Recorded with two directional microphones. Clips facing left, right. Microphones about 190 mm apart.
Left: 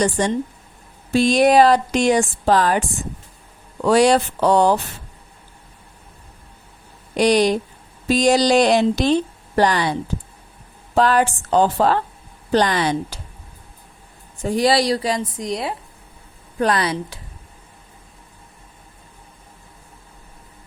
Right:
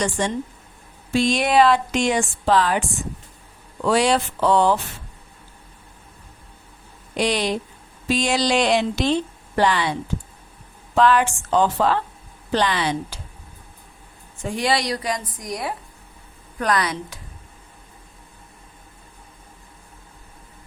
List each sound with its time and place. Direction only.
0.0 s a woman's voice: 40° left (ahead or behind)
3.8 s a woman's voice: 40° left (ahead or behind)
7.2 s a woman's voice: 40° left (ahead or behind)
10.9 s a woman's voice: 40° left (ahead or behind)
14.4 s a woman's voice: 35° left (ahead or behind)